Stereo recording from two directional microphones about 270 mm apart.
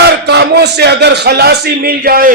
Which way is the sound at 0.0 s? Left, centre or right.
Right.